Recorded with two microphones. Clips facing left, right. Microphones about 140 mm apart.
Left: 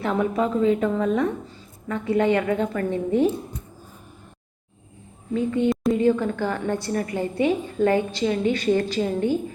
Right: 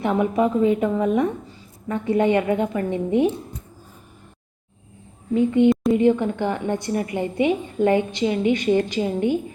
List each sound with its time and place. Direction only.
0.0 s a woman's voice: 15° right (ahead or behind)
5.3 s a woman's voice: 20° right (ahead or behind)